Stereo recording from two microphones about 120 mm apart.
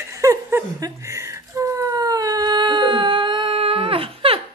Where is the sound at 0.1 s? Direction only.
25° right (ahead or behind).